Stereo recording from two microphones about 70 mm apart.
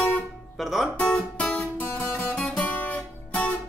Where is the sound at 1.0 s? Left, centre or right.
Centre.